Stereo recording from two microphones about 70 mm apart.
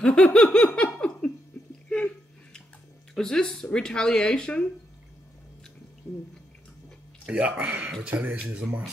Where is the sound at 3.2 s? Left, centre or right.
Centre.